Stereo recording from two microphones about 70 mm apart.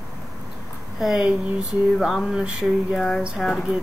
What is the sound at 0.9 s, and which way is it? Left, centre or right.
Speech, centre.